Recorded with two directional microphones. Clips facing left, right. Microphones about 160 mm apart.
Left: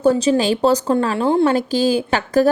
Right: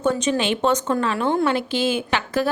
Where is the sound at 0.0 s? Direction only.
35° left (ahead or behind).